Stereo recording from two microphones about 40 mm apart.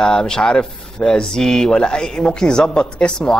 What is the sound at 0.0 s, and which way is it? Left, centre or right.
Speech, centre.